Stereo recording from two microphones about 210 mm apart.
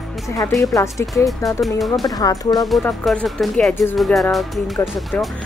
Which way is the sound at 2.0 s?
15° left (ahead or behind).